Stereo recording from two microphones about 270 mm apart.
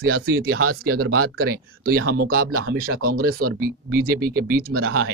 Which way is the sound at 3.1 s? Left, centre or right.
Right.